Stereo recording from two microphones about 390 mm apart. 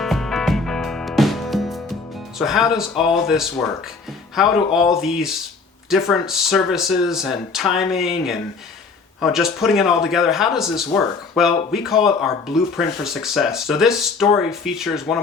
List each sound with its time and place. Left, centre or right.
0.0 s music: centre
2.4 s speech: centre